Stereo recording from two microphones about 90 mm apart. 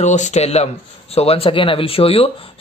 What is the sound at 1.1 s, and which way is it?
Speech, 90° left.